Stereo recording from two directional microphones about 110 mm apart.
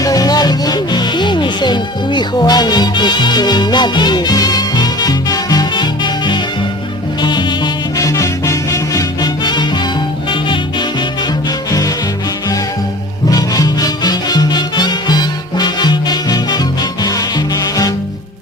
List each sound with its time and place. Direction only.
0.0 s music: 35° left (ahead or behind)
8.0 s music: 30° left (ahead or behind)
13.3 s music: 35° left (ahead or behind)